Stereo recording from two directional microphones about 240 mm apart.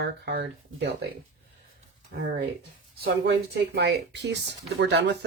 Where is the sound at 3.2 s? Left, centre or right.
Right.